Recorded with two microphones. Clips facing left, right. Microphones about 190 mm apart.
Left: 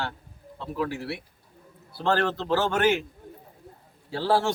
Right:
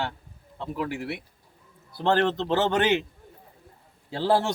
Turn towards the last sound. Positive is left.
turn(degrees=-20)  # may be behind; listen again after turning